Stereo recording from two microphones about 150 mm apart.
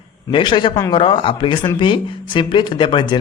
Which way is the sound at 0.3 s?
35° left (ahead or behind).